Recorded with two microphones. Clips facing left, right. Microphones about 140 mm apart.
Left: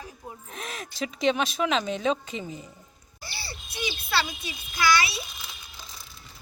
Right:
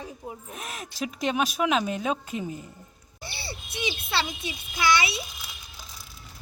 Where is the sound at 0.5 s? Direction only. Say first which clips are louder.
Even; 5° right (ahead or behind).